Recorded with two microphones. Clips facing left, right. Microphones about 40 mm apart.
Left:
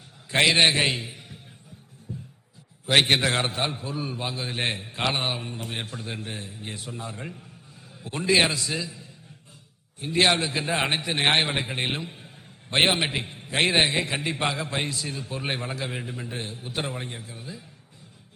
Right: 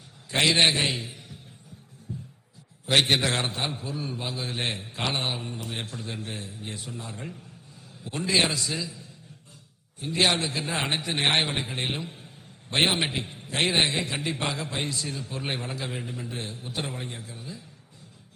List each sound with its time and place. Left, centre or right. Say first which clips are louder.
0.3 s a man's voice: left 2 dB; centre
0.9 s a sound: left 1 dB; centre
2.8 s a man's voice: left 2 dB; centre